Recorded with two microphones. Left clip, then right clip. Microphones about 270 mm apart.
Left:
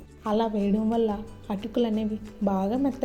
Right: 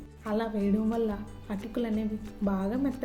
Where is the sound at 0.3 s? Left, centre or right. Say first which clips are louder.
Left 5 dB; centre.